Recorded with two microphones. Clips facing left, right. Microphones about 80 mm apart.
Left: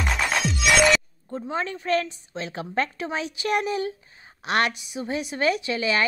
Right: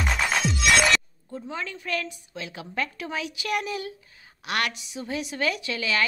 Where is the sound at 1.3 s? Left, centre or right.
Left.